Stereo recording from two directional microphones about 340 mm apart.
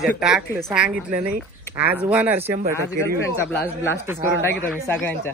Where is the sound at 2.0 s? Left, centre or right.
Centre.